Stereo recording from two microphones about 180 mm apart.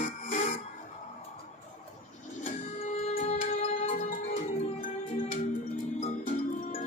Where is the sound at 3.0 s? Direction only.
35° left (ahead or behind).